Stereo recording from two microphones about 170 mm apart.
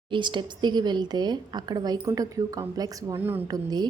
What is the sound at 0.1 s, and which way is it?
A woman's voice, 25° right (ahead or behind).